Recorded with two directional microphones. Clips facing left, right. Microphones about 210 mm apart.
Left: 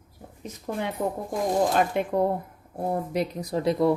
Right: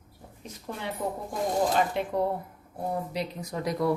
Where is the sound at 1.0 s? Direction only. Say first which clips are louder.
Left 1 dB; 45° left (ahead or behind).